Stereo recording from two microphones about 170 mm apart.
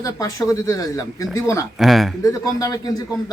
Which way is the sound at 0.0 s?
20° left (ahead or behind).